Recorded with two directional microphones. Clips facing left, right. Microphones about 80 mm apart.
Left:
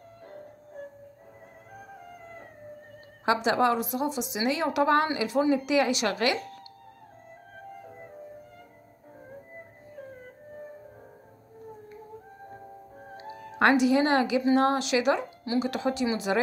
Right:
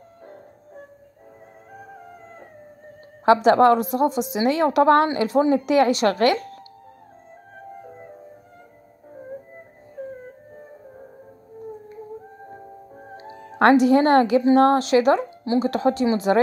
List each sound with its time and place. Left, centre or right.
3.4 s a woman's voice: right
13.0 s music: right
13.6 s a woman's voice: right